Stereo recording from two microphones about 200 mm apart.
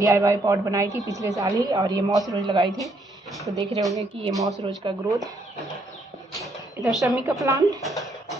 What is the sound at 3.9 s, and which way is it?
A woman's voice, 25° right (ahead or behind).